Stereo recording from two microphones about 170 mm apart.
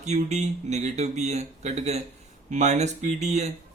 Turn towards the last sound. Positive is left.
turn(degrees=-40)  # may be behind; listen again after turning